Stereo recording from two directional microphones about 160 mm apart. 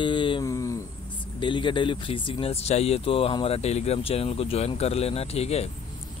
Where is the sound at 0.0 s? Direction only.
30° left (ahead or behind).